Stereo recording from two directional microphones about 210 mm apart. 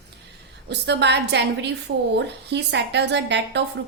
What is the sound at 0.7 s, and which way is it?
A woman's voice, 55° right (ahead or behind).